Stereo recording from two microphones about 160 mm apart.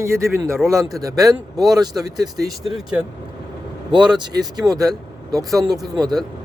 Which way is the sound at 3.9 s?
30° right (ahead or behind).